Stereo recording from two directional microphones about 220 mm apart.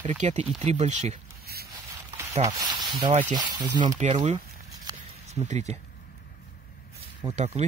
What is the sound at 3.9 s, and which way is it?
Speech, 30° right (ahead or behind).